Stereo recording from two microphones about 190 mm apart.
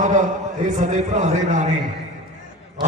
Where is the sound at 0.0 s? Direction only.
40° right (ahead or behind).